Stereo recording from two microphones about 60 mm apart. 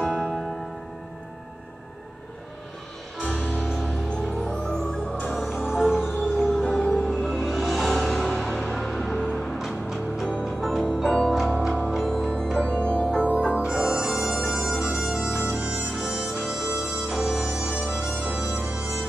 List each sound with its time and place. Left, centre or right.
0.0 s music: centre
3.2 s music: centre
3.6 s music: centre
4.1 s music: centre
5.3 s music: centre
6.3 s music: centre
7.2 s music: centre
11.5 s music: centre
13.7 s bagpipes: centre
15.9 s harmonica: centre
16.4 s music: centre